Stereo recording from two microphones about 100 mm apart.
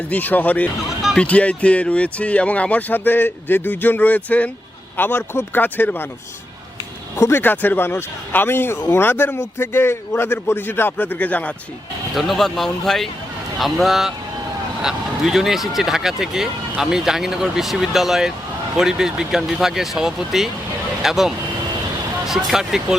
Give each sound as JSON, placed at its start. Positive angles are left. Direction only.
{"t": 0.1, "sound": "a man's voice", "side_deg": 15}
{"t": 7.2, "sound": "a man's voice", "side_deg": 25}
{"t": 12.1, "sound": "speech", "side_deg": 0}